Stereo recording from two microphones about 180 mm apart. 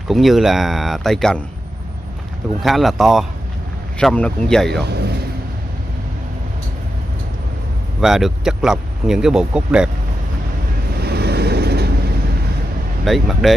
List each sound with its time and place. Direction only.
0.1 s speech: centre (ahead or behind)
2.6 s speech: centre (ahead or behind)
4.8 s a man's voice: 65° right (ahead or behind)
8.0 s speech: centre (ahead or behind)
11.0 s vehicle: 65° right (ahead or behind)
13.0 s speech: centre (ahead or behind)